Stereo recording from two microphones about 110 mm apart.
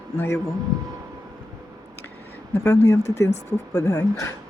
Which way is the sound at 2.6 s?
25° left (ahead or behind).